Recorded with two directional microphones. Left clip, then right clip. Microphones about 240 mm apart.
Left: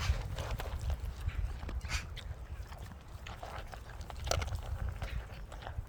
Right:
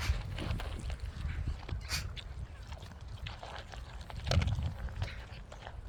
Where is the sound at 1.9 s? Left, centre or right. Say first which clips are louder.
Right 2 dB; right.